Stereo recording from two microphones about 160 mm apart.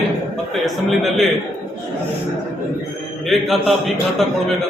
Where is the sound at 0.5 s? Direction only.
Centre (ahead or behind).